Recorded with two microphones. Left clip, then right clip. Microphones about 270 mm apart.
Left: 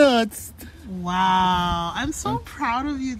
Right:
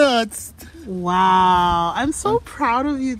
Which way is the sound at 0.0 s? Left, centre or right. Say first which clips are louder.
Right 1 dB; right.